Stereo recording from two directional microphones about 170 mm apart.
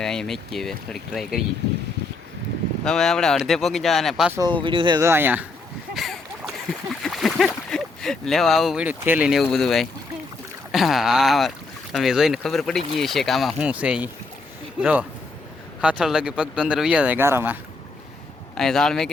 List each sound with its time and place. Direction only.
0.0 s speech: 5° left (ahead or behind)
2.8 s speech: 5° left (ahead or behind)
4.3 s speech: 20° right (ahead or behind)
4.9 s speech: 15° right (ahead or behind)
5.9 s boat: centre (ahead or behind)
7.0 s speech: centre (ahead or behind)
18.5 s speech: 5° left (ahead or behind)